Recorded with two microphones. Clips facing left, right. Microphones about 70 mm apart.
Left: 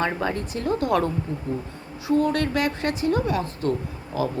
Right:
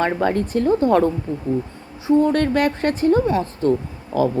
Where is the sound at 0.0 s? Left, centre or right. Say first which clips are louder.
Right 6 dB; right.